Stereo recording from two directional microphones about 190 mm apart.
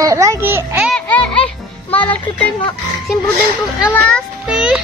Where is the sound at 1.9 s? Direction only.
5° left (ahead or behind).